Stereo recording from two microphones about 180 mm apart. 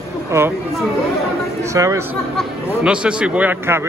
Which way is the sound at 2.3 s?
5° right (ahead or behind).